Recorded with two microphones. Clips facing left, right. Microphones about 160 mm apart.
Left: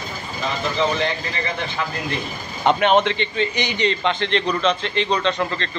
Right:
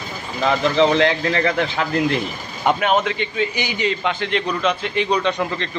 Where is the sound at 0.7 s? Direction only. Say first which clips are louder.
Right 5 dB; 90° right.